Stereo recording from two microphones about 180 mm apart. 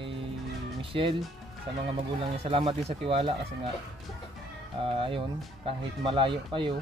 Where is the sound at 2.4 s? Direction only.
30° right (ahead or behind).